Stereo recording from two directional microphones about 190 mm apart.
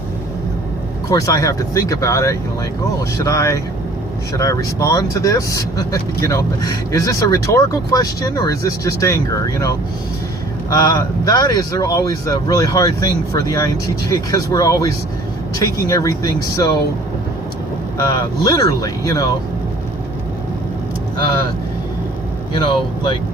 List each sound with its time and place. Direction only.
1.1 s speech: 20° left (ahead or behind)
10.7 s speech: 20° left (ahead or behind)
17.9 s speech: 20° left (ahead or behind)
22.5 s speech: 25° left (ahead or behind)